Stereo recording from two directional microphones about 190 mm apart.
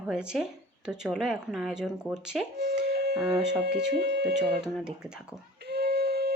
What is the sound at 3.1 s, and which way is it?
Speech, 5° right (ahead or behind).